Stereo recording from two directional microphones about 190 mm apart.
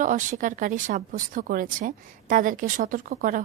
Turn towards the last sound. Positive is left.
turn(degrees=-45)  # may be behind; listen again after turning